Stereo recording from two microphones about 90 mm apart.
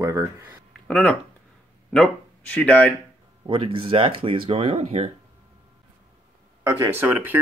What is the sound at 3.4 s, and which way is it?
Speech, 70° right (ahead or behind).